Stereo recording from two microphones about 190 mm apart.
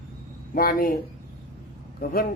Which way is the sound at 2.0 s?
50° left (ahead or behind).